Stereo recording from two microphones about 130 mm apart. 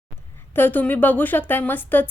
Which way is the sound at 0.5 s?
15° left (ahead or behind).